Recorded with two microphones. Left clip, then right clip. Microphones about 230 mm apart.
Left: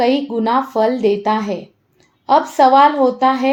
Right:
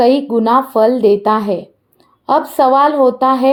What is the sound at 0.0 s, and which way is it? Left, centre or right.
A woman's voice, right.